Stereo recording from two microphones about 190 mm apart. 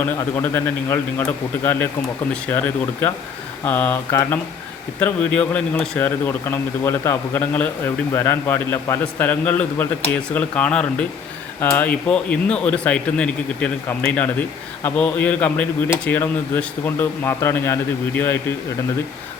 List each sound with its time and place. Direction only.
0.0 s a man's voice: 10° left (ahead or behind)